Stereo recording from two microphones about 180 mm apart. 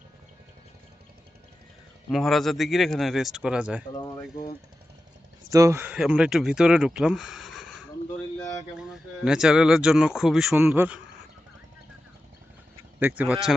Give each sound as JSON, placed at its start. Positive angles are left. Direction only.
{"t": 2.0, "sound": "speech", "side_deg": 0}
{"t": 3.9, "sound": "speech", "side_deg": 20}
{"t": 5.5, "sound": "speech", "side_deg": -15}
{"t": 8.4, "sound": "a sound", "side_deg": 20}
{"t": 8.8, "sound": "speech", "side_deg": -5}
{"t": 13.0, "sound": "speech", "side_deg": -10}